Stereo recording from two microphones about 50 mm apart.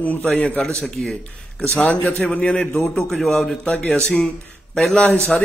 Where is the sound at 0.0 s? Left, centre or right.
Left.